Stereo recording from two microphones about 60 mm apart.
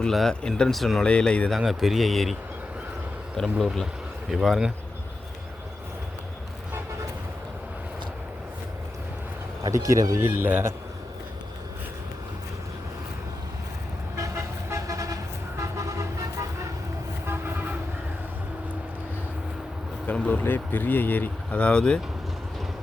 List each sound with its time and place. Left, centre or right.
0.1 s speech: centre
1.0 s speech: centre
1.5 s speech: centre
3.4 s speech: centre
9.6 s speech: right
10.2 s a man's voice: right
14.3 s vehicle: right
15.8 s vehicle: right
20.1 s a sound: left
20.4 s speech: left
21.6 s speech: centre